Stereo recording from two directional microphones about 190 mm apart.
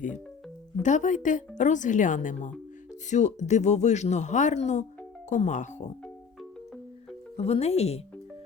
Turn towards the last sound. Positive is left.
turn(degrees=35)  # may be behind; listen again after turning